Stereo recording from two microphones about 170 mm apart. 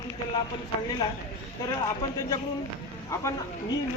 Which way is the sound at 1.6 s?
20° left (ahead or behind).